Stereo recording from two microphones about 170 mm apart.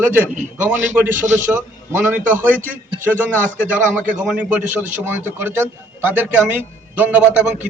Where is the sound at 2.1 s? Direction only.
10° right (ahead or behind).